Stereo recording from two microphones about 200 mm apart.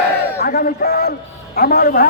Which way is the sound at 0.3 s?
50° left (ahead or behind).